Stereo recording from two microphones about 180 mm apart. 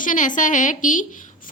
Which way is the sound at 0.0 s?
45° left (ahead or behind).